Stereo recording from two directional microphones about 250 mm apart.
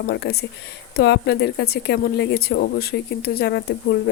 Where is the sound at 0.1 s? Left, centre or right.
Left.